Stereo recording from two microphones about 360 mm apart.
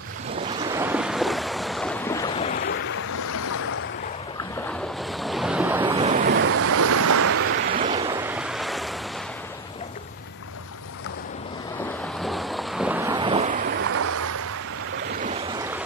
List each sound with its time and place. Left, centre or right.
0.7 s waves: centre
5.2 s waves: centre
5.9 s waves: centre; by 7.5 s right
7.7 s waves: centre
12.2 s boat: centre
13.9 s waves: right